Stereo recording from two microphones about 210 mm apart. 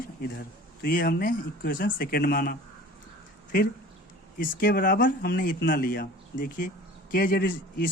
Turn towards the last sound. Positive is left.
turn(degrees=40)  # may be behind; listen again after turning